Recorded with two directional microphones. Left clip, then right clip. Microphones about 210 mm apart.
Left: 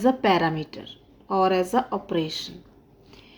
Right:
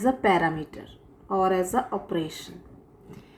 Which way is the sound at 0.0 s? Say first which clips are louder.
Left 1 dB; 50° left (ahead or behind).